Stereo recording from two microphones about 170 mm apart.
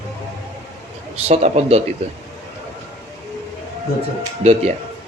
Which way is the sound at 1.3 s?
40° right (ahead or behind).